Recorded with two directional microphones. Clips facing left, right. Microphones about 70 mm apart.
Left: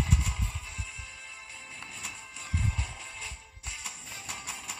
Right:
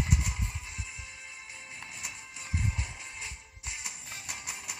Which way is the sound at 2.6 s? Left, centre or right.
Right.